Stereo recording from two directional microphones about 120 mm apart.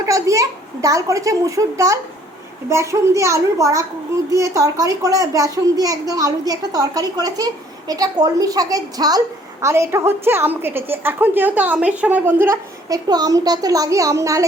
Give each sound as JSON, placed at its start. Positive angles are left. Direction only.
{"t": 0.0, "sound": "a child's voice", "side_deg": -25}
{"t": 12.9, "sound": "a child's voice", "side_deg": -30}